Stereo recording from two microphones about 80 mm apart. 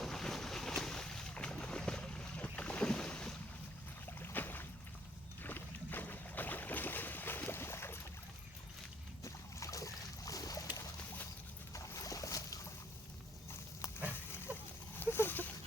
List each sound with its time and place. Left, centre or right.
0.0 s boat: centre
4.2 s boat: left
9.2 s boat: left
11.7 s boat: left
14.9 s a sound: left